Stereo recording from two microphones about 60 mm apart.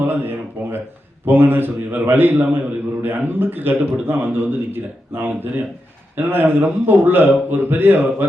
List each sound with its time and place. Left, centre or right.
0.0 s a man's voice: right